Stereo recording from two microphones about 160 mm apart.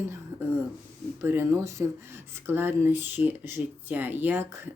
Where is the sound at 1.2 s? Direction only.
15° right (ahead or behind).